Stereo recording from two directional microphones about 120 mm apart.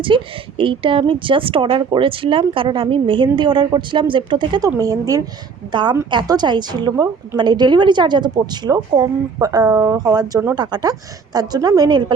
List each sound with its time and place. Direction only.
0.1 s speech: 45° right (ahead or behind)
4.8 s speech: 30° right (ahead or behind)
5.7 s a woman's voice: 40° right (ahead or behind)